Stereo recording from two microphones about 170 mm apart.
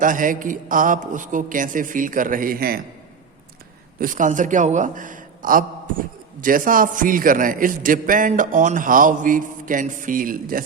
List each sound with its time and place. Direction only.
0.0 s a man's voice: 50° right (ahead or behind)
4.0 s a man's voice: 50° right (ahead or behind)